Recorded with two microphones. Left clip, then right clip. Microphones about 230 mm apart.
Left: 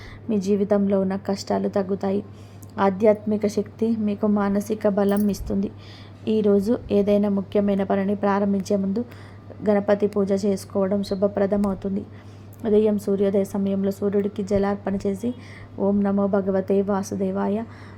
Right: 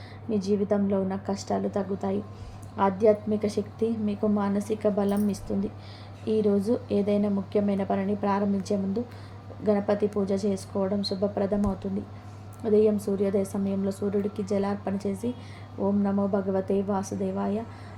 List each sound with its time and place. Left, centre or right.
0.3 s a woman's voice: left
12.6 s a woman's voice: left